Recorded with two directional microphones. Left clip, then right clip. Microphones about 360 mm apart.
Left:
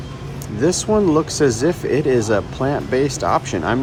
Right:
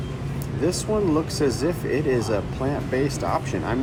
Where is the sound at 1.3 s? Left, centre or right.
Left.